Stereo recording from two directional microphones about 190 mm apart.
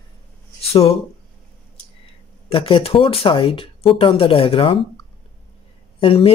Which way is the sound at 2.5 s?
30° left (ahead or behind).